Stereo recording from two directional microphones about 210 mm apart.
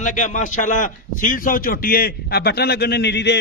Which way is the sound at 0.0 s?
35° left (ahead or behind).